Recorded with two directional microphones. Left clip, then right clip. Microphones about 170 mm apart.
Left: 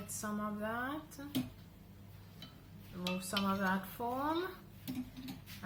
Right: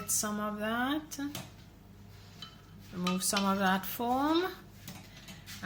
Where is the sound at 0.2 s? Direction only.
75° right (ahead or behind).